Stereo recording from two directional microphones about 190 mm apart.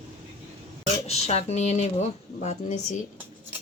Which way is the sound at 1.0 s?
35° left (ahead or behind).